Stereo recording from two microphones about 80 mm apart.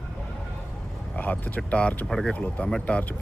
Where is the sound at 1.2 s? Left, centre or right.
Centre.